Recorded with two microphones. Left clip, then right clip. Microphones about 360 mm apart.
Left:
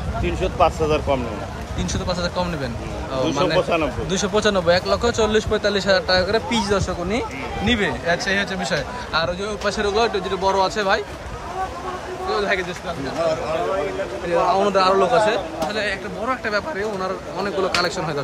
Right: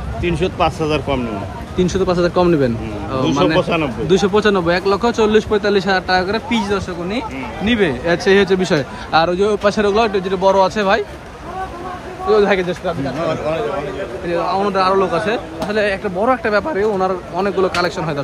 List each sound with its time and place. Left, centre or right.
0.2 s speech: right
1.8 s speech: centre
3.6 s speech: right
4.1 s speech: centre
12.3 s speech: centre
14.3 s speech: centre